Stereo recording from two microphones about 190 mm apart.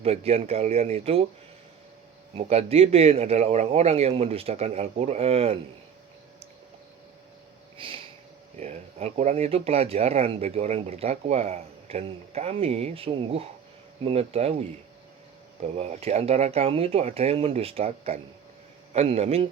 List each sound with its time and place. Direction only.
0.0 s speech: 30° right (ahead or behind)
2.3 s speech: 35° right (ahead or behind)
7.8 s sniff: 25° right (ahead or behind)
8.5 s speech: 35° right (ahead or behind)